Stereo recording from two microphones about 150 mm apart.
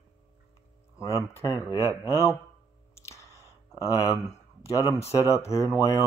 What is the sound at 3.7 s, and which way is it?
Speech, 25° left (ahead or behind).